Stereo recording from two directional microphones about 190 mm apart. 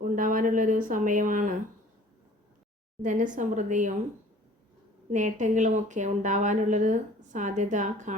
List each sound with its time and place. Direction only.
0.2 s speech: 45° right (ahead or behind)
3.0 s speech: 45° right (ahead or behind)
5.1 s speech: 40° right (ahead or behind)